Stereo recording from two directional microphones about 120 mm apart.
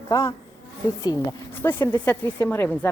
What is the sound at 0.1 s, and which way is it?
Speech, 25° left (ahead or behind).